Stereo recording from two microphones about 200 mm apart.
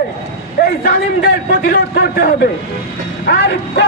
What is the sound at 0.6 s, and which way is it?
A man's voice, 50° left (ahead or behind).